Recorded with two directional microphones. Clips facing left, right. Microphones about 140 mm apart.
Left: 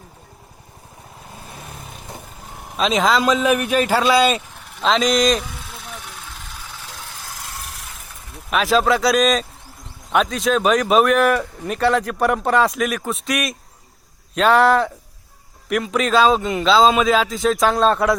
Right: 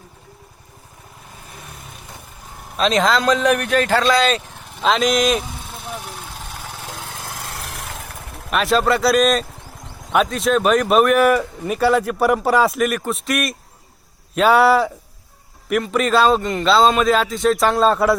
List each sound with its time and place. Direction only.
2.7 s speech: centre (ahead or behind)
4.8 s speech: centre (ahead or behind)
6.7 s lawn mower: 50° right (ahead or behind)
7.4 s a sound: 85° right
8.4 s speech: centre (ahead or behind)